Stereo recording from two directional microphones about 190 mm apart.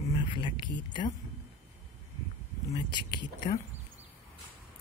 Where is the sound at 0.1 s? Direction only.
25° left (ahead or behind).